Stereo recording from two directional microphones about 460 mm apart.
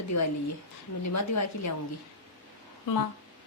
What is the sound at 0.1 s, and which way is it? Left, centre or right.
A woman's voice, left.